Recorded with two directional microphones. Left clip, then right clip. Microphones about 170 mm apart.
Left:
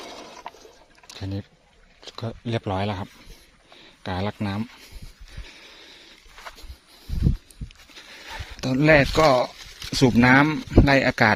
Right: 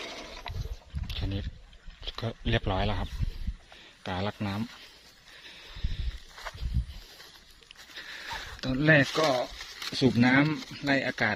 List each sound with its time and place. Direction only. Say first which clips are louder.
0.5 s a sound: left 5 dB; 35° left (ahead or behind)
1.1 s rowboat: left 3 dB; 35° left (ahead or behind)
2.0 s speech: left 1 dB; 30° left (ahead or behind)
8.6 s speech: left 6 dB; 45° left (ahead or behind)
9.1 s speech: left 9 dB; 60° left (ahead or behind)